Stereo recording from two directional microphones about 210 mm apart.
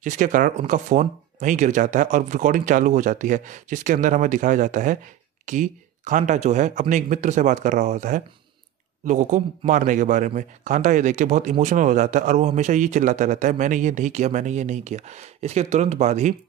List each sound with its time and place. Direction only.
0.0 s a man's voice: 40° right (ahead or behind)